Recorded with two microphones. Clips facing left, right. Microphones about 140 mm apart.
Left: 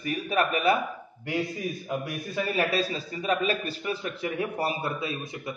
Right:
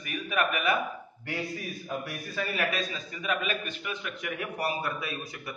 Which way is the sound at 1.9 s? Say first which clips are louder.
Left 2 dB; 15° left (ahead or behind).